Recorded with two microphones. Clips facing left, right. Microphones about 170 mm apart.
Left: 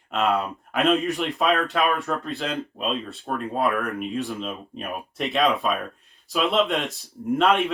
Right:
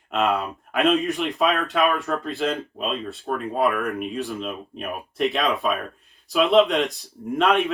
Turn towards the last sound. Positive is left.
turn(degrees=0)  # may be behind; listen again after turning